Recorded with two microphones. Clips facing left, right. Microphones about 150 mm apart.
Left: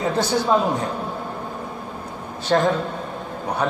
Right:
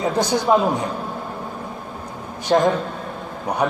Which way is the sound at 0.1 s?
15° right (ahead or behind).